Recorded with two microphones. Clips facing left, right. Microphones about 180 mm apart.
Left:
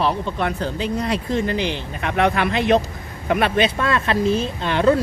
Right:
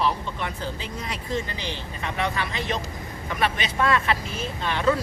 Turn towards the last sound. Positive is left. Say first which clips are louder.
# left 6 dB
turn(degrees=70)  # may be behind; listen again after turning